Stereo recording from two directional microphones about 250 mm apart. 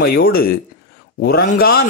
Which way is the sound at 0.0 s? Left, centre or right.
Left.